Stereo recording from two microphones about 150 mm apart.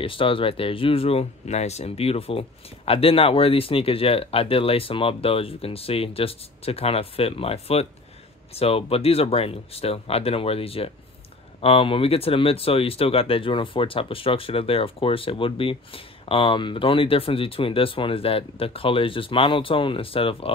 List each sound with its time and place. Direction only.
0.0 s speech: 35° left (ahead or behind)